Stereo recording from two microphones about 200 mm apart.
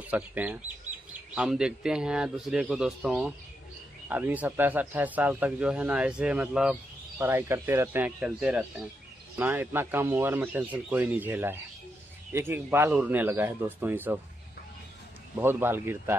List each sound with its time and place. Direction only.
0.0 s a man's voice: 10° right (ahead or behind)
15.3 s speech: 10° right (ahead or behind)